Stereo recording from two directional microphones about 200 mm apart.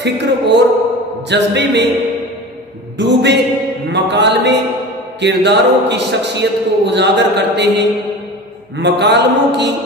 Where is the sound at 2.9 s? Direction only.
60° right (ahead or behind).